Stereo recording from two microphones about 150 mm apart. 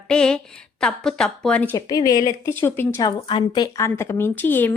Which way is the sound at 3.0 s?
30° left (ahead or behind).